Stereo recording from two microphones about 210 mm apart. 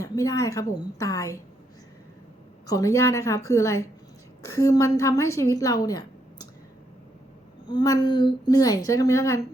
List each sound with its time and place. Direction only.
0.0 s a woman's voice: 15° left (ahead or behind)
2.6 s a woman's voice: 15° left (ahead or behind)
7.7 s a woman's voice: 20° left (ahead or behind)